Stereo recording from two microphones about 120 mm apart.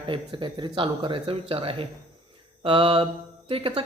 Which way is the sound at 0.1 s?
40° right (ahead or behind).